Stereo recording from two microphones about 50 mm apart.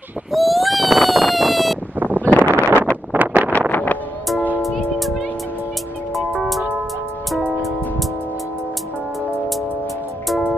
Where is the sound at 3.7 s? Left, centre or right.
Left.